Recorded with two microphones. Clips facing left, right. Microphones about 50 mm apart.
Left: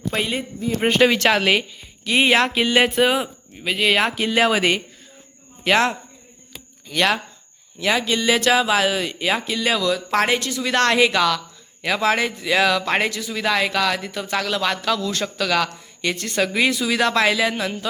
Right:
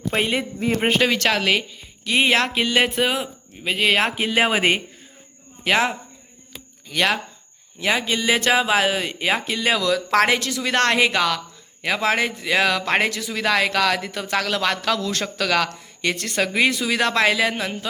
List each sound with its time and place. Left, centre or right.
0.1 s speech: right
0.3 s speech: right
1.0 s speech: centre
3.8 s speech: right
4.0 s speech: centre
5.6 s speech: centre
7.8 s speech: right
9.8 s speech: right
10.6 s speech: right
16.4 s speech: right